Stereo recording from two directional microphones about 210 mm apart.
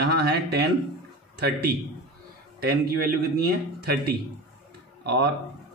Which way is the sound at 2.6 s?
50° right (ahead or behind).